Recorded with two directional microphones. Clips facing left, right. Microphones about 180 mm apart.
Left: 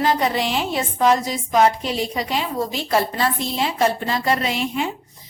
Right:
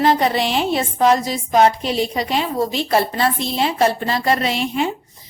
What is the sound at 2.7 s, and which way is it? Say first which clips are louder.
A woman's voice: right 1 dB; 30° right (ahead or behind).